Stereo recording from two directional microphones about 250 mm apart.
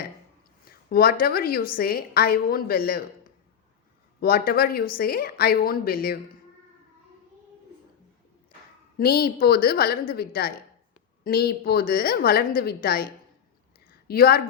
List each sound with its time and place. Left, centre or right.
0.6 s a woman's voice: left
4.2 s a woman's voice: left
9.0 s a woman's voice: left
14.1 s a woman's voice: left